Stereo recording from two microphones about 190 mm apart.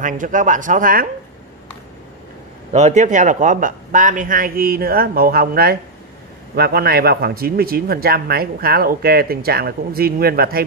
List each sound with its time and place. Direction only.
0.0 s speech: 45° right (ahead or behind)
2.7 s speech: 40° right (ahead or behind)